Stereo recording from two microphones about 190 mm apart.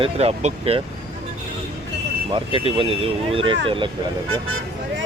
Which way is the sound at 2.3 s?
25° right (ahead or behind).